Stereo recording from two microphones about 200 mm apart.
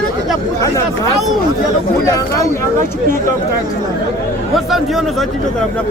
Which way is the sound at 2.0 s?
15° left (ahead or behind).